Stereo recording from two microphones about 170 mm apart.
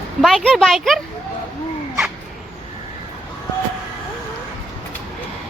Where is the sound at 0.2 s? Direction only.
Centre (ahead or behind).